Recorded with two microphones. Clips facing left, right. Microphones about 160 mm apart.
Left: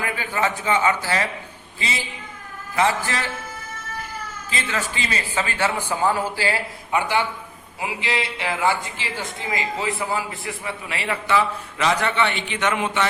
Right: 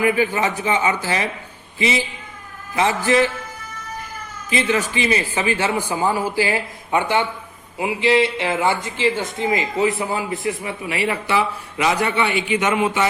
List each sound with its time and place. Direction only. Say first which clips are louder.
0.0 s a man's voice: right 6 dB; 15° right (ahead or behind)
4.4 s speech: right 8 dB; 15° right (ahead or behind)